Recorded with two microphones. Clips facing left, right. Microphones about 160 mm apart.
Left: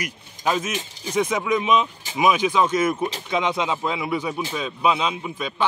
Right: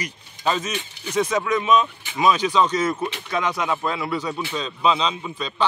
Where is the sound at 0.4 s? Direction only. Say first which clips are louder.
Even; 10° left (ahead or behind).